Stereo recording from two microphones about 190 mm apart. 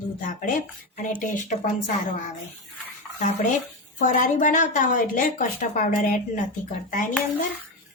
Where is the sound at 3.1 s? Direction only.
40° left (ahead or behind).